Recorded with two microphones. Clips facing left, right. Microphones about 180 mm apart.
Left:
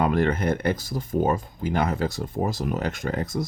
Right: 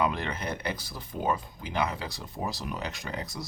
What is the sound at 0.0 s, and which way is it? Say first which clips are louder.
Speech: left 8 dB; 50° left (ahead or behind).